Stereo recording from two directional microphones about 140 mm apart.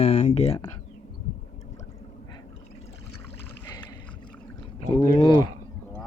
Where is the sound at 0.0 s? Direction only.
50° left (ahead or behind).